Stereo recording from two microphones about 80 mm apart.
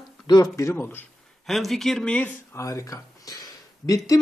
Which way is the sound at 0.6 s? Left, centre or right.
Left.